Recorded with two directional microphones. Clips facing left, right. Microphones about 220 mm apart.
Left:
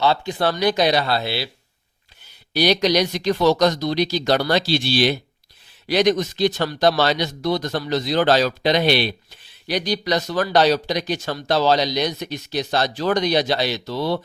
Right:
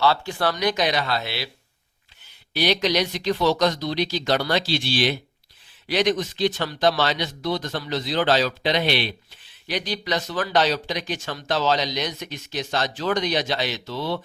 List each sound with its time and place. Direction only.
0.0 s speech: 20° left (ahead or behind)
2.5 s speech: 40° left (ahead or behind)